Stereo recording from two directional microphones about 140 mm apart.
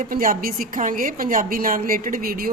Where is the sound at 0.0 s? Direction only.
85° right.